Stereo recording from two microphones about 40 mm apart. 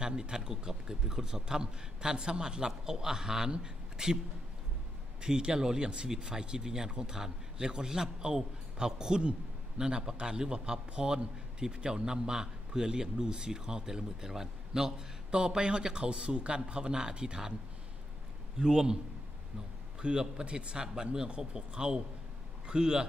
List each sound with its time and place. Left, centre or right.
0.0 s a man's voice: centre
5.2 s a man's voice: centre
18.6 s a man's voice: centre
20.0 s a man's voice: centre